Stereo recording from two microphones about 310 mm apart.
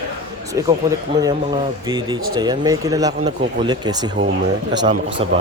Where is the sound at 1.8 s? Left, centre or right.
Centre.